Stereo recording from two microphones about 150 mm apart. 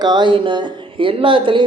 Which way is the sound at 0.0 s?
30° right (ahead or behind).